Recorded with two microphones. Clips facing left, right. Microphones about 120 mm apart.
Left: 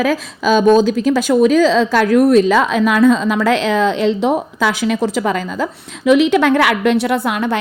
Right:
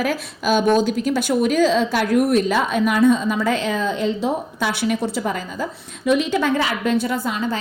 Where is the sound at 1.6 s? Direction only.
90° left.